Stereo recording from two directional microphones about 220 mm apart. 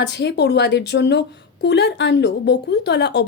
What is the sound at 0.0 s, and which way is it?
Speech, 50° left (ahead or behind).